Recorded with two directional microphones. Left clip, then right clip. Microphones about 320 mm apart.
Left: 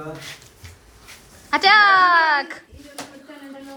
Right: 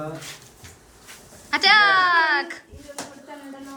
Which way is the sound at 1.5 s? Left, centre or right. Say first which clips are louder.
Left 3 dB; centre.